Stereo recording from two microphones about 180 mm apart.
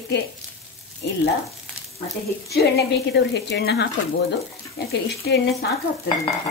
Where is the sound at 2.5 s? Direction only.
65° left (ahead or behind).